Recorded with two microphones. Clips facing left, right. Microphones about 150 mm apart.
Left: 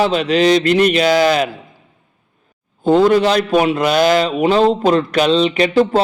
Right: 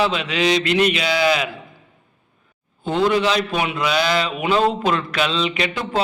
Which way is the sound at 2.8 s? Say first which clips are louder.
Left 7 dB; 40° left (ahead or behind).